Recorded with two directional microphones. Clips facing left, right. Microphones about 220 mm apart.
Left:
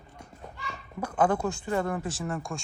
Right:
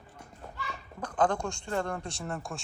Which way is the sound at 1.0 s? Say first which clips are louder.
Left 3 dB; 10° left (ahead or behind).